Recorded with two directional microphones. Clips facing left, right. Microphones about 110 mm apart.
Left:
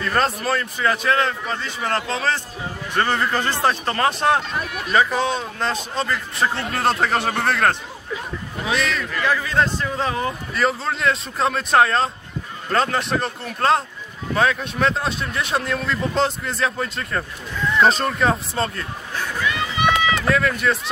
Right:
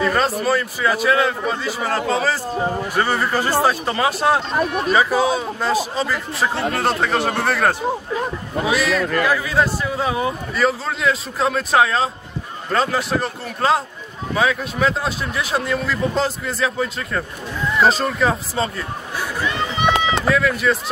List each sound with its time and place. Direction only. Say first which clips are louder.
0.4 s a man's voice: right 3 dB; 5° right (ahead or behind)
2.5 s a man's voice: right 10 dB; 45° right (ahead or behind)
2.9 s a man's voice: left 3 dB; 10° right (ahead or behind)
4.6 s speech: right 8 dB; 35° right (ahead or behind)
4.9 s a man's voice: right 1 dB; 10° right (ahead or behind)
19.4 s run: right 1 dB; 30° right (ahead or behind)
20.2 s speech: right 3 dB; centre (ahead or behind)